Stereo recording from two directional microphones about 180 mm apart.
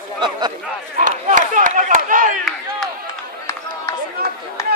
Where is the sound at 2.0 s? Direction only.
50° right (ahead or behind).